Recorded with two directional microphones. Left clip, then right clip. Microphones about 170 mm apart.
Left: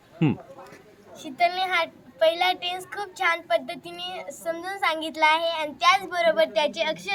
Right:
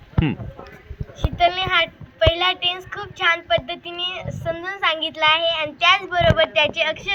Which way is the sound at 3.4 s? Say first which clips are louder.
Right 4 dB; 20° left (ahead or behind).